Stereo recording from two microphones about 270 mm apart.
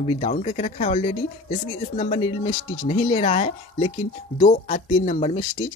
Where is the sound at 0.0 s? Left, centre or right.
Left.